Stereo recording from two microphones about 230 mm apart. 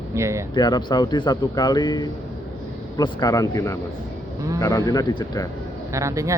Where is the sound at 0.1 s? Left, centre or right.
Centre.